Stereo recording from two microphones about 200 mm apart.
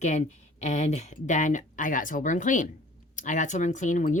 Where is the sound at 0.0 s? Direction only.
35° left (ahead or behind).